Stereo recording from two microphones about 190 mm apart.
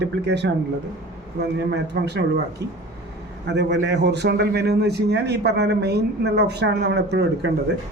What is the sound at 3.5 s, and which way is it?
A man's voice, 65° right (ahead or behind).